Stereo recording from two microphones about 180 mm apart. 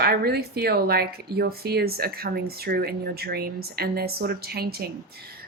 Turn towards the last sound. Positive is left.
turn(degrees=-60)  # may be behind; listen again after turning